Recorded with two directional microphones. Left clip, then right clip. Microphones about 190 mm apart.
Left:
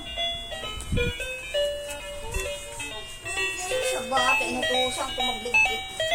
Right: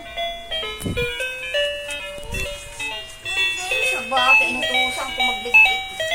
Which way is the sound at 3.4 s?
20° right (ahead or behind).